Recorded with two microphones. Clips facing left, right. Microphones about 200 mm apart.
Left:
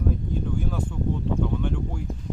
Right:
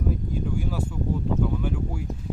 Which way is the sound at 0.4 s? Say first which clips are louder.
Right 1 dB; 5° right (ahead or behind).